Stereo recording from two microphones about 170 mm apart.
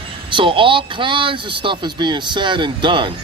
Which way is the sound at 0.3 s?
30° right (ahead or behind).